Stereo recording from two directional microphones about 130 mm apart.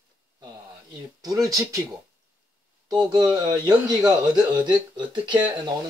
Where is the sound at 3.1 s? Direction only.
30° right (ahead or behind).